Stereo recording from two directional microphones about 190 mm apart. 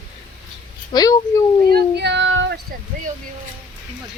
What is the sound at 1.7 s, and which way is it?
Child singing, 60° right (ahead or behind).